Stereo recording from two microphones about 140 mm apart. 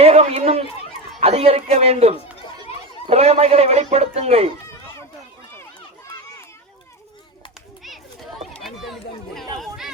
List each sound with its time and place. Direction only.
0.0 s speech: 45° right (ahead or behind)
2.7 s children playing: 45° left (ahead or behind)
3.1 s speech: 50° right (ahead or behind)
8.6 s speech: centre (ahead or behind)
9.6 s chatter: 5° right (ahead or behind)